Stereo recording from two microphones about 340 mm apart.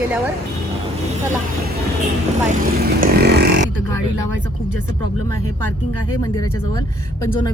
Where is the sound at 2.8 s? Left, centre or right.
Right.